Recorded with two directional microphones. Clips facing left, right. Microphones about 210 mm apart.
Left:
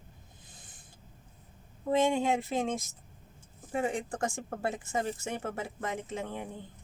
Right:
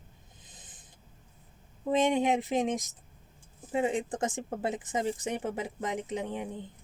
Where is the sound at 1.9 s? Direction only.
20° right (ahead or behind).